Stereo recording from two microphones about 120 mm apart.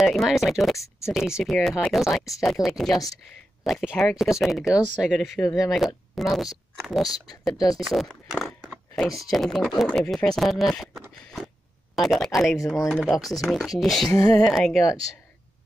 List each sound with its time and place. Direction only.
0.0 s speech: centre (ahead or behind)
14.1 s speech: 30° left (ahead or behind)
14.4 s speech: centre (ahead or behind)